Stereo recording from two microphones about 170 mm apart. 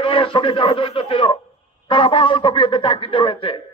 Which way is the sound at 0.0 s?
30° left (ahead or behind).